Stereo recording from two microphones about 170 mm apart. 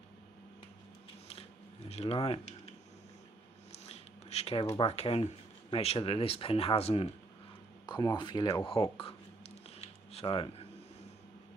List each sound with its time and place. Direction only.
1.9 s speech: 35° left (ahead or behind)
3.7 s a sound: 40° left (ahead or behind)
4.6 s speech: 25° left (ahead or behind)
4.9 s speech: 35° left (ahead or behind)
7.9 s speech: 25° left (ahead or behind)
9.7 s a sound: 35° left (ahead or behind)